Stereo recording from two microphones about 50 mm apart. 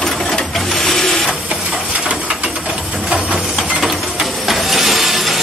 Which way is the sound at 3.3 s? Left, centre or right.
Centre.